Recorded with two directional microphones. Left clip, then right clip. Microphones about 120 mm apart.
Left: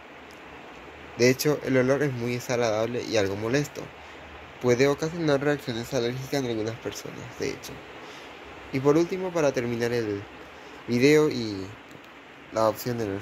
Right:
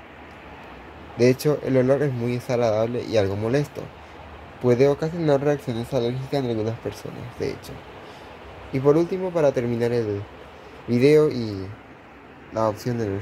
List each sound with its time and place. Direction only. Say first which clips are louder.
1.1 s speech: right 3 dB; 15° right (ahead or behind)
8.7 s speech: right 3 dB; 20° right (ahead or behind)
12.5 s speech: right 1 dB; centre (ahead or behind)